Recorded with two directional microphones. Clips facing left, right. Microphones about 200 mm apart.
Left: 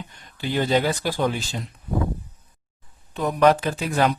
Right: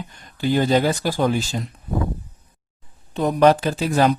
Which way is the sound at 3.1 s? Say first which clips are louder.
Right 3 dB; 30° right (ahead or behind).